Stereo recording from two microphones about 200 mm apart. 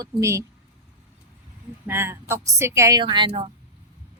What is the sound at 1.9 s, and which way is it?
A woman's voice, 10° right (ahead or behind).